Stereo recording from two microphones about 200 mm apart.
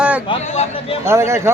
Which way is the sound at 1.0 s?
15° right (ahead or behind).